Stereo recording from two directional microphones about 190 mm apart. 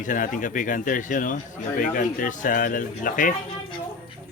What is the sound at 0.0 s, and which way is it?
Speech, 45° left (ahead or behind).